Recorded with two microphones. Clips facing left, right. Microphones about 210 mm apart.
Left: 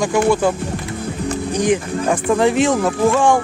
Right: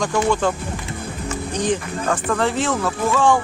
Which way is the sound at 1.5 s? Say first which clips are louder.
Left 4 dB; 10° left (ahead or behind).